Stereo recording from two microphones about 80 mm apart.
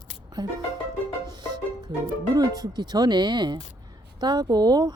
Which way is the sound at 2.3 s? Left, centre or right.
Right.